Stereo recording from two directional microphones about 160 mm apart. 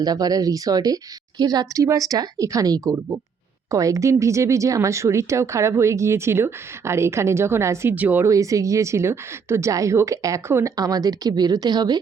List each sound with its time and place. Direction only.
0.0 s speech: 25° right (ahead or behind)